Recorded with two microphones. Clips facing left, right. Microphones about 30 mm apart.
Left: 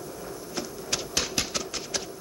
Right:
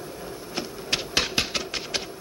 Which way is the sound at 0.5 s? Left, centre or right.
Right.